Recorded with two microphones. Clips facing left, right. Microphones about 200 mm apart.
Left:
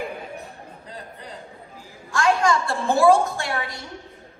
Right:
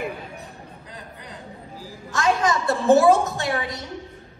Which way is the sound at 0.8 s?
30° left (ahead or behind).